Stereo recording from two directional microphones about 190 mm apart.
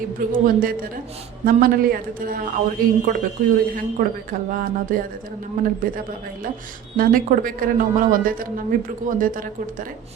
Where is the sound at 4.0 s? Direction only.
50° right (ahead or behind).